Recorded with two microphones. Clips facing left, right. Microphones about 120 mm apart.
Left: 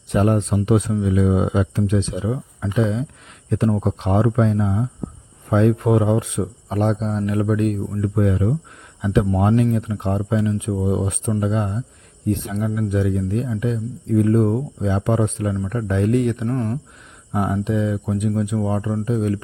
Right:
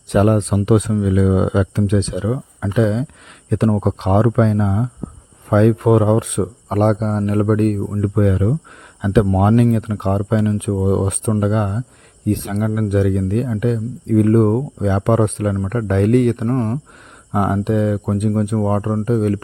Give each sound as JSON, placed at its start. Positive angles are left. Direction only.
{"t": 0.1, "sound": "speech", "side_deg": -90}
{"t": 3.5, "sound": "speech", "side_deg": -75}
{"t": 8.1, "sound": "speech", "side_deg": -75}
{"t": 9.0, "sound": "speech", "side_deg": -90}
{"t": 17.3, "sound": "speech", "side_deg": -60}